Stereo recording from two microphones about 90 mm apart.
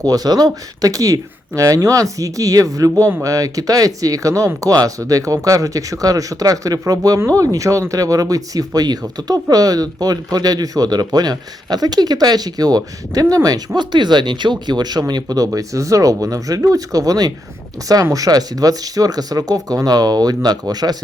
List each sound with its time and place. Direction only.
0.0 s speech: 45° right (ahead or behind)